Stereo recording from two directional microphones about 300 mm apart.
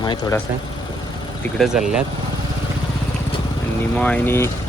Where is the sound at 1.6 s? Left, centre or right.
Centre.